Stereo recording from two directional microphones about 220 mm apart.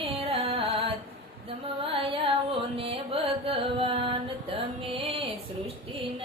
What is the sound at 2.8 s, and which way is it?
Music, 25° right (ahead or behind).